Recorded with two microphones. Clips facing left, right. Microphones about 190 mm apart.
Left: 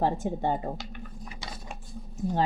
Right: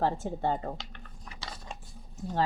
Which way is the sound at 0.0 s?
15° left (ahead or behind).